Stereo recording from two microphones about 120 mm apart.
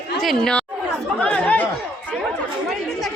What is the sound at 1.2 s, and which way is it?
Chatter, 10° left (ahead or behind).